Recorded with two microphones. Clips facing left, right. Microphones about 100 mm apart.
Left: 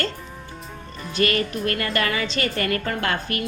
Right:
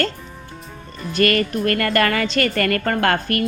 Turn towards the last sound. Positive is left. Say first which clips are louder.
# right 6 dB
turn(degrees=-55)  # may be behind; listen again after turning